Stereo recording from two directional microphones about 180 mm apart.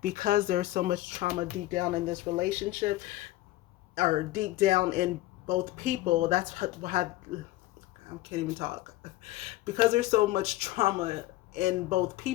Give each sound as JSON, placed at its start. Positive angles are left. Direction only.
{"t": 0.0, "sound": "speech", "side_deg": -50}
{"t": 8.3, "sound": "speech", "side_deg": -35}